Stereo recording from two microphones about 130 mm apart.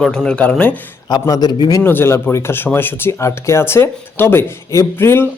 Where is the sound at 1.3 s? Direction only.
35° left (ahead or behind).